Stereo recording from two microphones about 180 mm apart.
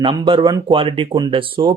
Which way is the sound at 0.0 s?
30° right (ahead or behind).